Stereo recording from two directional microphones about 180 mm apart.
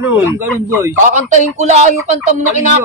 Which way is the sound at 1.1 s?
40° right (ahead or behind).